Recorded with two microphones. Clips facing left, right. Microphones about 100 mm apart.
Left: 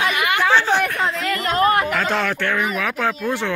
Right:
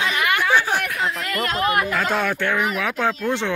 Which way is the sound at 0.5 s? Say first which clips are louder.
Left 3 dB; 10° right (ahead or behind).